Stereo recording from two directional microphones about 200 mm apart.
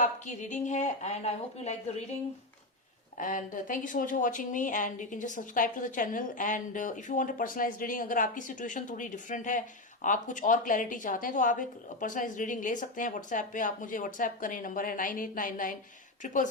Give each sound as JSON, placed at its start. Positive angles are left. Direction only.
{"t": 0.0, "sound": "speech", "side_deg": 35}
{"t": 3.2, "sound": "speech", "side_deg": 40}